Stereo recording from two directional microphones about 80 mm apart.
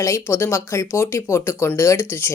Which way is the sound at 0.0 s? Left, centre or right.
Left.